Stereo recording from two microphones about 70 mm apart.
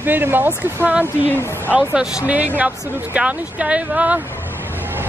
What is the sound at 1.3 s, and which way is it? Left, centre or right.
Speech, left.